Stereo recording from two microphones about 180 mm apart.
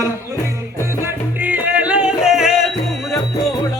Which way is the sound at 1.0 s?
10° right (ahead or behind).